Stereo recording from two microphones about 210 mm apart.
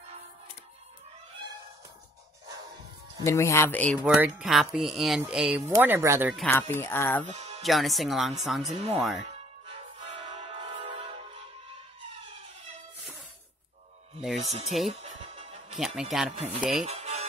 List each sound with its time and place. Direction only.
3.3 s speech: 15° left (ahead or behind)
4.0 s speech: 5° right (ahead or behind)
6.3 s speech: 10° left (ahead or behind)
7.2 s music: 30° right (ahead or behind)
7.6 s speech: centre (ahead or behind)
9.2 s music: 30° right (ahead or behind)
14.4 s speech: 30° right (ahead or behind)
14.9 s music: 30° right (ahead or behind)
16.0 s speech: centre (ahead or behind)
16.9 s music: 30° right (ahead or behind)